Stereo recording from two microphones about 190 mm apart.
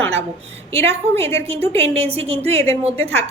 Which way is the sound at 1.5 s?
30° right (ahead or behind).